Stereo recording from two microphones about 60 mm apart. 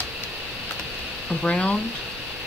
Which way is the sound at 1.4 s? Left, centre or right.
Centre.